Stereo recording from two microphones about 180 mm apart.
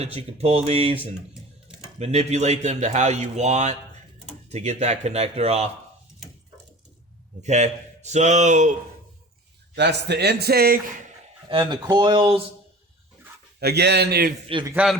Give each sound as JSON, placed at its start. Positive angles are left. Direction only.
{"t": 0.0, "sound": "speech", "side_deg": -35}
{"t": 1.3, "sound": "a sound", "side_deg": -5}
{"t": 2.0, "sound": "speech", "side_deg": -35}
{"t": 7.4, "sound": "speech", "side_deg": -40}
{"t": 9.7, "sound": "a man's voice", "side_deg": -70}
{"t": 11.6, "sound": "speech", "side_deg": -15}
{"t": 11.9, "sound": "speech", "side_deg": -25}
{"t": 13.6, "sound": "a man's voice", "side_deg": -65}
{"t": 14.5, "sound": "speech", "side_deg": -20}